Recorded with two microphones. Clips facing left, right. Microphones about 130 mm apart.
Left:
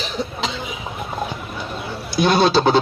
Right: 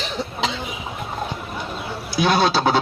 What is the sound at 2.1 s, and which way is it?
Speech, 5° right (ahead or behind).